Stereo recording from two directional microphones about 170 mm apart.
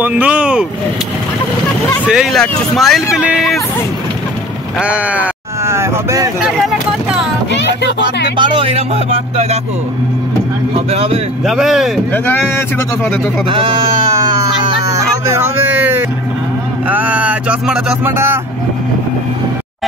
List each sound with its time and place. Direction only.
0.0 s speech: 5° right (ahead or behind)
2.0 s speech: 5° right (ahead or behind)
4.7 s a sound: 5° right (ahead or behind)
6.4 s vehicle: 5° right (ahead or behind)
7.5 s speech: 90° left
8.4 s speech: 35° right (ahead or behind)
10.9 s speech: 35° right (ahead or behind)
11.4 s speech: centre (ahead or behind)
12.1 s speech: 10° left (ahead or behind)
13.5 s speech: 30° right (ahead or behind); by 18.4 s 15° right (ahead or behind)